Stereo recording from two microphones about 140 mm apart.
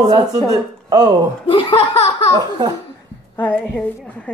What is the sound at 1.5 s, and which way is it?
Speech, 40° left (ahead or behind).